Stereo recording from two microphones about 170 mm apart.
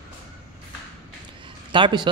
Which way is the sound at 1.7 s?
30° right (ahead or behind).